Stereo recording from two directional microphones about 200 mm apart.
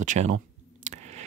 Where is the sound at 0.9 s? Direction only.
35° right (ahead or behind).